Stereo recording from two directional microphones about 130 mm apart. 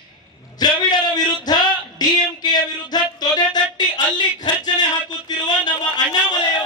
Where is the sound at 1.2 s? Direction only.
30° left (ahead or behind).